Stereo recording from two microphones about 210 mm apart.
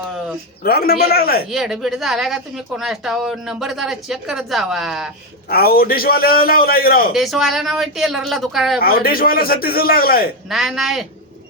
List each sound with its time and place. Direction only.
0.6 s a man's voice: 45° left (ahead or behind)
1.5 s speech: centre (ahead or behind)
5.5 s a man's voice: 45° left (ahead or behind)
7.1 s speech: centre (ahead or behind)
8.8 s a man's voice: 45° left (ahead or behind)
10.5 s speech: centre (ahead or behind)